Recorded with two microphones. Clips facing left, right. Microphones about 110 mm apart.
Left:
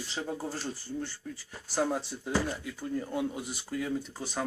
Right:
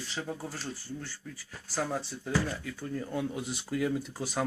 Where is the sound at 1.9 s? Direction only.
10° left (ahead or behind).